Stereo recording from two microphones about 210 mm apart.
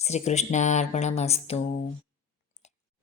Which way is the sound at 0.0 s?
30° left (ahead or behind).